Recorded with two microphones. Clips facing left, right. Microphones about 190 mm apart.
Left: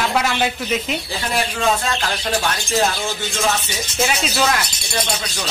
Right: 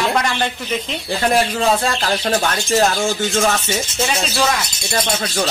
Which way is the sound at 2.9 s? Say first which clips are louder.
Right 6 dB; 45° right (ahead or behind).